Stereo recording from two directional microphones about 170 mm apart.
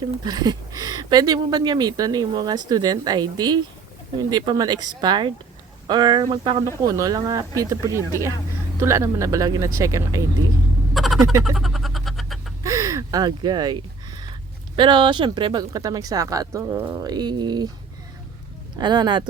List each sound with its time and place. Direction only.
0.3 s speech: 20° right (ahead or behind)
10.9 s a sound: centre (ahead or behind)
12.6 s gasp: 20° right (ahead or behind)
14.8 s speech: 30° right (ahead or behind)
18.8 s speech: 25° right (ahead or behind)